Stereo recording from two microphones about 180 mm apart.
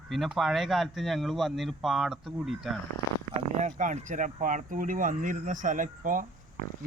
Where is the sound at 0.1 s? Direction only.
Centre (ahead or behind).